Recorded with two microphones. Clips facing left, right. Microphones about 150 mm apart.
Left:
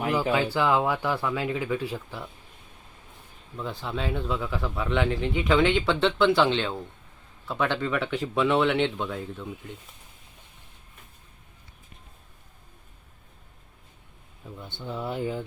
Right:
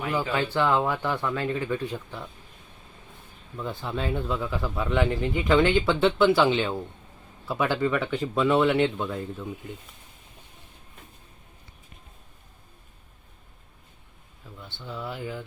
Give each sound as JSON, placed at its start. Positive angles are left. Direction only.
{"t": 0.1, "sound": "speech", "side_deg": 10}
{"t": 3.6, "sound": "speech", "side_deg": 0}
{"t": 14.4, "sound": "a sound", "side_deg": 20}
{"t": 14.8, "sound": "speech", "side_deg": 25}